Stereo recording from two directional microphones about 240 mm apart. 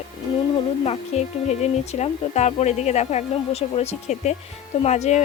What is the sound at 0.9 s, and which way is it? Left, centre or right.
Speech, left.